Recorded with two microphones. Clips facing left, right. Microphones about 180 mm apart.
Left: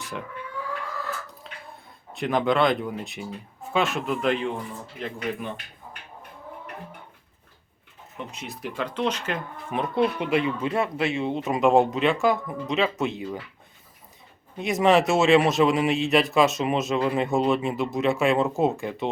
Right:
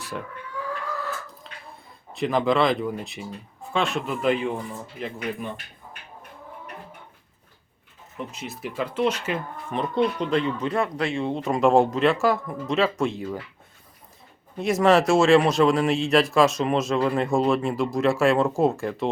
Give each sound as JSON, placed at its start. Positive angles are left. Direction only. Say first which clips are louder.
{"t": 1.7, "sound": "speech", "louder": "even", "side_deg": 0}
{"t": 8.3, "sound": "speech", "louder": "right 1 dB", "side_deg": 0}
{"t": 9.7, "sound": "speech", "louder": "even", "side_deg": 10}
{"t": 10.8, "sound": "speech", "louder": "even", "side_deg": 20}
{"t": 11.1, "sound": "speech", "louder": "right 1 dB", "side_deg": 5}
{"t": 14.6, "sound": "speech", "louder": "right 1 dB", "side_deg": 0}